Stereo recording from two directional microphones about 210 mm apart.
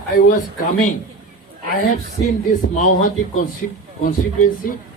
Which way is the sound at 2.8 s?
40° left (ahead or behind).